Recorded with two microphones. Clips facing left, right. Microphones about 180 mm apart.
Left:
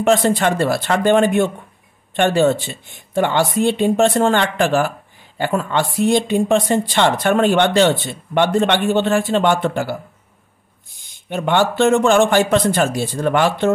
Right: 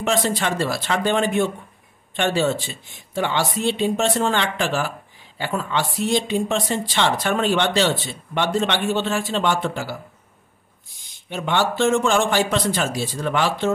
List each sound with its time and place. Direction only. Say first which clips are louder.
0.0 s speech: left 7 dB; 55° left (ahead or behind)
11.2 s speech: left 5 dB; 55° left (ahead or behind)